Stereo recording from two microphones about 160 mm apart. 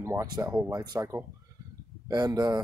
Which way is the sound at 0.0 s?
20° right (ahead or behind).